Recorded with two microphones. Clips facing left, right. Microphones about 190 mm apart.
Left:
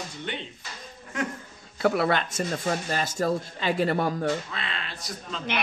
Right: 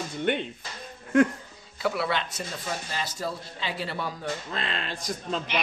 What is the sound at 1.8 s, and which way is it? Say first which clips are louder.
Speech: left 4 dB; 50° left (ahead or behind).